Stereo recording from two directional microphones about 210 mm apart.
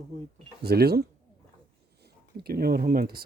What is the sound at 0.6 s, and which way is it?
Speech, 50° right (ahead or behind).